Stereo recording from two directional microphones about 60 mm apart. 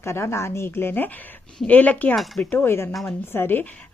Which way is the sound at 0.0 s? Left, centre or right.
Left.